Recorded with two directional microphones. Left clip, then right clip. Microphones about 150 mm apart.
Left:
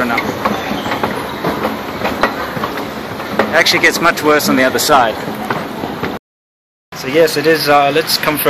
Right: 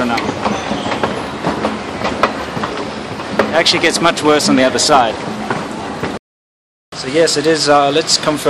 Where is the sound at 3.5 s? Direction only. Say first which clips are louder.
Left 3 dB; 15° right (ahead or behind).